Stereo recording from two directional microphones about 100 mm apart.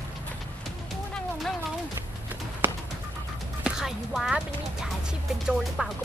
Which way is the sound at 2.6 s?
20° right (ahead or behind).